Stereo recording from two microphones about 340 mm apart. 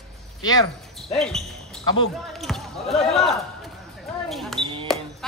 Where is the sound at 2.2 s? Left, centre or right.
Centre.